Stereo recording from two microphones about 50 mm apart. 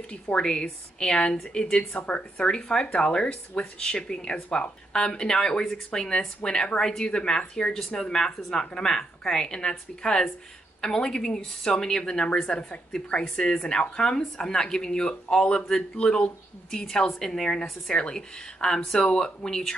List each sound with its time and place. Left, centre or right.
0.1 s speech: centre
2.0 s speech: left